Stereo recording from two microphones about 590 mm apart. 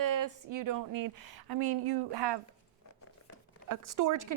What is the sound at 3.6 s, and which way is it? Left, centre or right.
Speech, right.